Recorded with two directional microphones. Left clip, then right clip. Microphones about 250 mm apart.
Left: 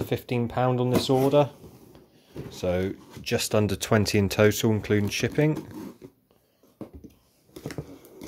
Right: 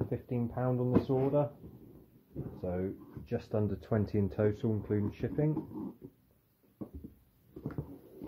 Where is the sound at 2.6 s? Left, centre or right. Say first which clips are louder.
Left 10 dB; left.